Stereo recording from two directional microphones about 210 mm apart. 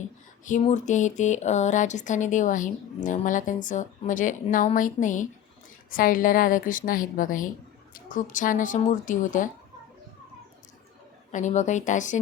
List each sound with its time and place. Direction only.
0.4 s speech: 35° left (ahead or behind)
11.3 s speech: 35° left (ahead or behind)